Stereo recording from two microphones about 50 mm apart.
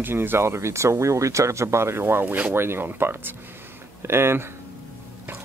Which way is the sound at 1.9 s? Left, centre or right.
Right.